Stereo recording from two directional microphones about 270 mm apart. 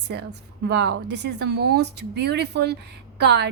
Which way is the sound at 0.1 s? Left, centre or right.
Right.